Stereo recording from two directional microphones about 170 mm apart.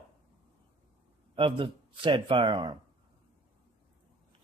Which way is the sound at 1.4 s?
30° right (ahead or behind).